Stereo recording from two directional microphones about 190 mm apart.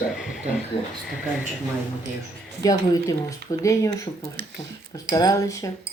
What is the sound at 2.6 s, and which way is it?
Speech, 20° left (ahead or behind).